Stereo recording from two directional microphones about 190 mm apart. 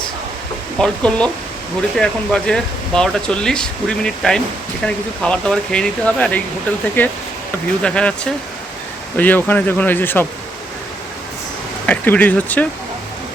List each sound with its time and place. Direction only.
0.8 s speech: 5° left (ahead or behind)
11.9 s speech: 10° left (ahead or behind)